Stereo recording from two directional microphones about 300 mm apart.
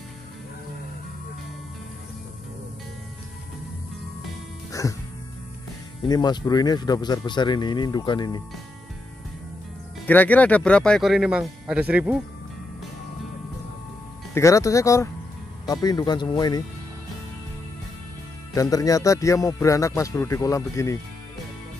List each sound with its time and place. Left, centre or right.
4.8 s music: centre
6.0 s speech: centre
10.0 s speech: centre
14.3 s speech: centre
18.5 s speech: centre